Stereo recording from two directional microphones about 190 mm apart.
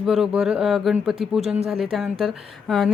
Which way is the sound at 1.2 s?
30° right (ahead or behind).